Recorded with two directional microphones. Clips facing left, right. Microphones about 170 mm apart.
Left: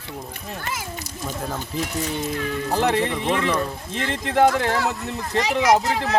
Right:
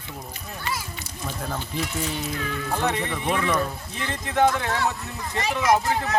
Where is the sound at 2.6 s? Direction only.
35° left (ahead or behind).